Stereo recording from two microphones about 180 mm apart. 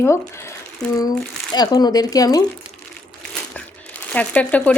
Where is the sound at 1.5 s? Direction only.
20° left (ahead or behind).